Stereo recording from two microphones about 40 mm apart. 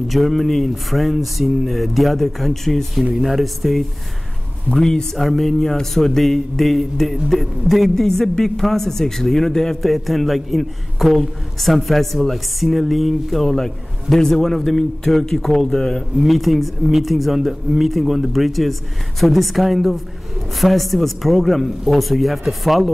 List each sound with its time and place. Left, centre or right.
0.1 s a man's voice: centre
4.6 s speech: centre
5.1 s speech: centre
9.8 s a man's voice: centre
16.2 s a man's voice: centre